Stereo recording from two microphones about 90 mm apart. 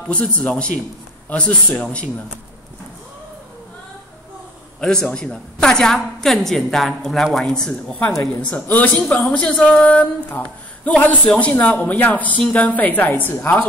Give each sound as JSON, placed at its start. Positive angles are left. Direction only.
{"t": 0.0, "sound": "speech", "side_deg": 10}
{"t": 4.7, "sound": "a woman's voice", "side_deg": 10}